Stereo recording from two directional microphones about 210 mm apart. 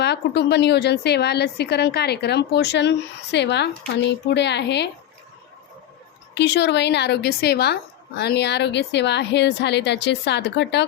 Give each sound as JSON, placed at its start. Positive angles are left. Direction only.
{"t": 0.0, "sound": "a woman's voice", "side_deg": 55}
{"t": 6.3, "sound": "a woman's voice", "side_deg": 55}